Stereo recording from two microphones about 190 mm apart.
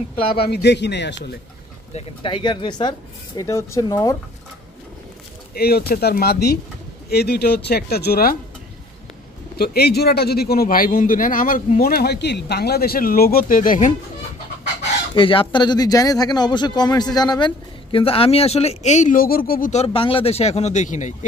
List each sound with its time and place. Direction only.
0.3 s speech: 60° left (ahead or behind)
2.0 s speech: 25° left (ahead or behind)
5.5 s speech: 55° left (ahead or behind)
9.6 s a man's voice: 55° left (ahead or behind)
15.1 s speech: 25° left (ahead or behind); by 19.7 s 50° left (ahead or behind)
19.7 s speech: 30° left (ahead or behind)